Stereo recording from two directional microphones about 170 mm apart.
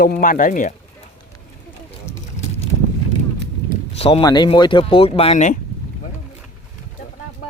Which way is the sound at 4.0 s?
30° left (ahead or behind).